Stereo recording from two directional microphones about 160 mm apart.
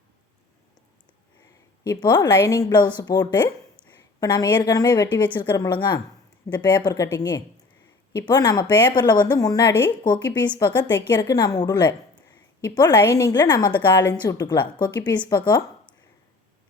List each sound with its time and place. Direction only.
1.9 s a woman's voice: 25° left (ahead or behind)
13.7 s a woman's voice: 15° left (ahead or behind)